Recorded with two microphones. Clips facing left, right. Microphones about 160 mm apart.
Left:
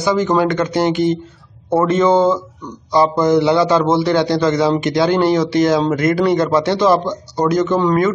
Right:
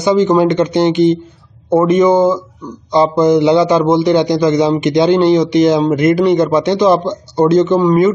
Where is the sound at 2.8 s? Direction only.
20° right (ahead or behind).